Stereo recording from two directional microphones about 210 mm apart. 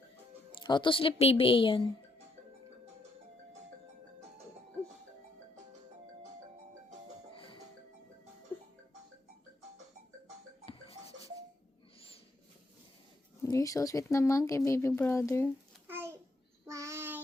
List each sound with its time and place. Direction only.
0.6 s a woman's voice: 20° left (ahead or behind)
7.3 s music: 25° left (ahead or behind)
13.4 s speech: 15° left (ahead or behind)
15.9 s a sound: 10° right (ahead or behind)
16.6 s child singing: 15° right (ahead or behind)